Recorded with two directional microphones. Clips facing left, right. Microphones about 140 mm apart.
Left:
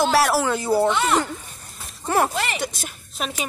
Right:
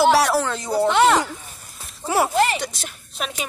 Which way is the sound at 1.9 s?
10° right (ahead or behind).